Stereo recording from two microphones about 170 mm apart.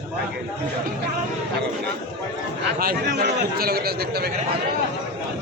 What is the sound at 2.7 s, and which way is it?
A man's voice, 60° right (ahead or behind).